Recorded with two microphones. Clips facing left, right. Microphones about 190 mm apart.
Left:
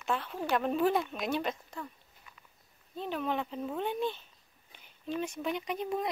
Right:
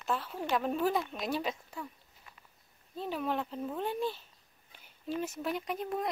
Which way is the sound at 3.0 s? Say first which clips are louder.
Even; 5° right (ahead or behind).